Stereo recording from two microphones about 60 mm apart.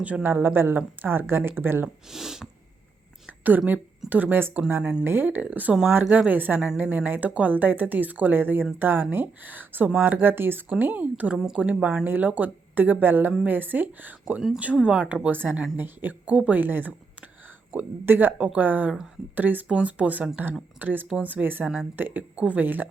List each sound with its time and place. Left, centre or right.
0.2 s speech: right
2.0 s speech: centre
3.2 s a sound: right
4.1 s speech: right
4.8 s speech: centre
5.0 s a woman's voice: right
18.0 s a woman's voice: right